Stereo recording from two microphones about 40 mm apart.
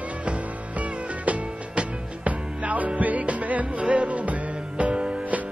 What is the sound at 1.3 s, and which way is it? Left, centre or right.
Music, right.